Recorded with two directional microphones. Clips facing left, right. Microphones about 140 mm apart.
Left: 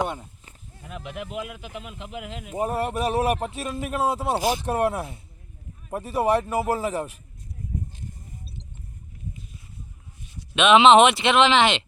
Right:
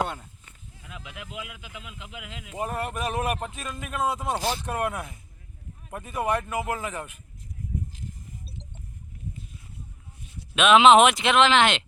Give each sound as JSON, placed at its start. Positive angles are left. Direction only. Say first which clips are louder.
{"t": 0.0, "sound": "livestock", "louder": "left 2 dB", "side_deg": 20}
{"t": 0.4, "sound": "speech", "louder": "left 4 dB", "side_deg": 35}
{"t": 4.4, "sound": "speech", "louder": "left 5 dB", "side_deg": 15}
{"t": 4.6, "sound": "speech", "louder": "left 5 dB", "side_deg": 30}
{"t": 10.5, "sound": "speech", "louder": "left 1 dB", "side_deg": 0}